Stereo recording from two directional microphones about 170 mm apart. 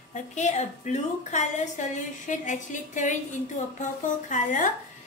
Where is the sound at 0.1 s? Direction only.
45° left (ahead or behind).